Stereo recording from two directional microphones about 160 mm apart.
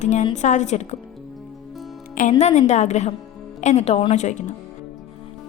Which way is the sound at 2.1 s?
55° left (ahead or behind).